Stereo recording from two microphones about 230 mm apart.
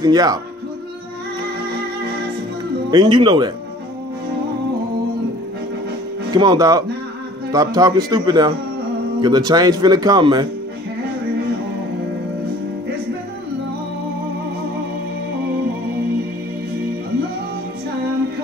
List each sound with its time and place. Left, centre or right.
0.0 s speech: centre
2.9 s speech: centre
6.3 s speech: centre